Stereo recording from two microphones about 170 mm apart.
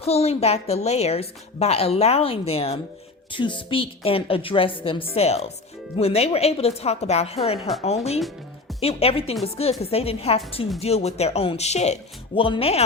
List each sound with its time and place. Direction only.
0.0 s a woman's voice: 35° left (ahead or behind)